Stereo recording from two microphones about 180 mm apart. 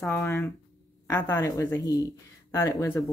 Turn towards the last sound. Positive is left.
turn(degrees=20)  # may be behind; listen again after turning